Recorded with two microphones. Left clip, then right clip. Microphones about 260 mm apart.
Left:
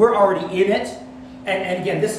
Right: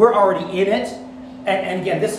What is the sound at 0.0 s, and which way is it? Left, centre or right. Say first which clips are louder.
Speech: right 1 dB; centre.